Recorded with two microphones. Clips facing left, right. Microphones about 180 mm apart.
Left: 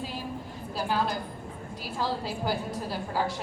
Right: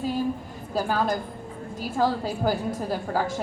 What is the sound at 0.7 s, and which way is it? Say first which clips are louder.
A woman's voice: right 4 dB; 45° right (ahead or behind).